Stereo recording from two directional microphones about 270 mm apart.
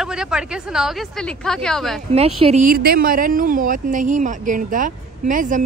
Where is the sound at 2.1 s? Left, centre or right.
Right.